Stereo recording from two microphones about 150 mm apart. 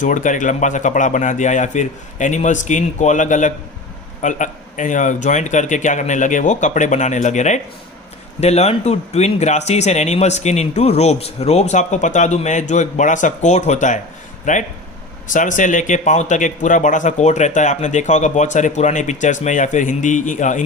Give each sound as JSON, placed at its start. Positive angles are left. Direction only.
{"t": 0.0, "sound": "speech", "side_deg": 55}